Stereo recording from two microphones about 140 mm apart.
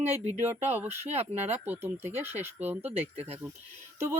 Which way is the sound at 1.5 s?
15° right (ahead or behind).